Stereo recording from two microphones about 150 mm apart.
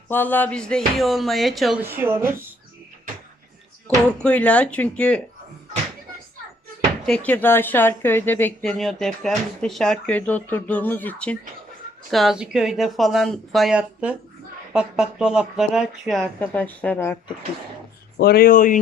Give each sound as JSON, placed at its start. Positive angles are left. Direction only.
{"t": 0.1, "sound": "speech", "side_deg": 15}
{"t": 1.8, "sound": "speech", "side_deg": -15}
{"t": 3.8, "sound": "speech", "side_deg": 10}
{"t": 7.0, "sound": "speech", "side_deg": 5}
{"t": 12.1, "sound": "speech", "side_deg": 0}
{"t": 18.2, "sound": "speech", "side_deg": 90}